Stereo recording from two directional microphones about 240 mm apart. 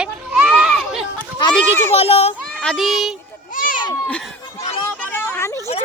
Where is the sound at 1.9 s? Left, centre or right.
Left.